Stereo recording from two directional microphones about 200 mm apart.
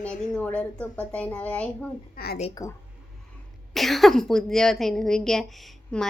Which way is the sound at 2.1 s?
50° left (ahead or behind).